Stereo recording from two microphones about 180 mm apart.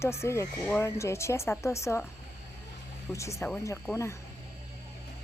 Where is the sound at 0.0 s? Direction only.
15° left (ahead or behind).